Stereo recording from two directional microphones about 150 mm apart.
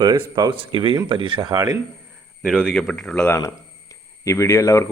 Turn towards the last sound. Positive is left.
turn(degrees=20)  # may be behind; listen again after turning